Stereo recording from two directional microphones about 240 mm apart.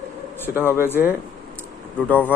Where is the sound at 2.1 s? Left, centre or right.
Centre.